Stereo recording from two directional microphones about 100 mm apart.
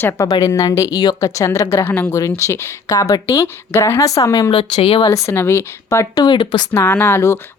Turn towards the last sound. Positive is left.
turn(degrees=25)  # may be behind; listen again after turning